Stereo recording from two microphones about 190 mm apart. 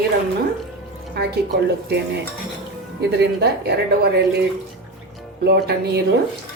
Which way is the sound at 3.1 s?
60° right (ahead or behind).